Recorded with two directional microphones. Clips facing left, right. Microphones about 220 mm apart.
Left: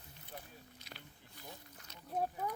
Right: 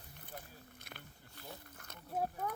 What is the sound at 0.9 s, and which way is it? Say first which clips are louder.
Wild animals: right 1 dB; 55° right (ahead or behind).